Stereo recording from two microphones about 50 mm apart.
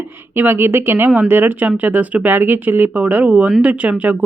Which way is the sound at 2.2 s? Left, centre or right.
Right.